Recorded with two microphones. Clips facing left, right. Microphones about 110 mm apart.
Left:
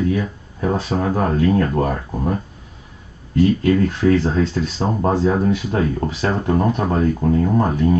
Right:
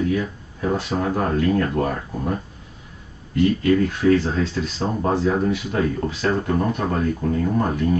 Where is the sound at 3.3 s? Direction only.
30° left (ahead or behind).